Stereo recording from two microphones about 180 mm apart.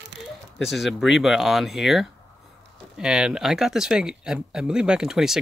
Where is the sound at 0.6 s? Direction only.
Centre (ahead or behind).